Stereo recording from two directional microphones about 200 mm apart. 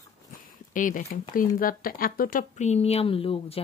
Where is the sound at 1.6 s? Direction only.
45° left (ahead or behind).